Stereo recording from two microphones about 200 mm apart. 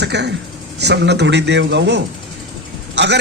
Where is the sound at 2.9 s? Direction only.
60° right (ahead or behind).